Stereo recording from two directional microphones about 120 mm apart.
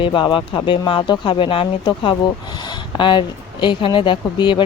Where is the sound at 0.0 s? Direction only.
45° left (ahead or behind).